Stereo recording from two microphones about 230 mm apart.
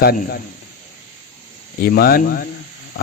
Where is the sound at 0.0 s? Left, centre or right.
Left.